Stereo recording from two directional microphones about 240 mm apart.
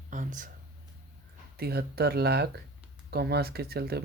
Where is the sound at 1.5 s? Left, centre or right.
Right.